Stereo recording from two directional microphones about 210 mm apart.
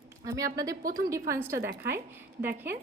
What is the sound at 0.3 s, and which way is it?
A woman's voice, 15° right (ahead or behind).